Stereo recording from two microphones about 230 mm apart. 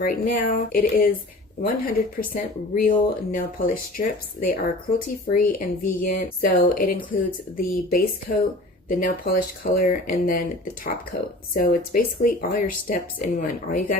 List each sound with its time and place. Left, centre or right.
0.0 s speech: left
11.5 s speech: left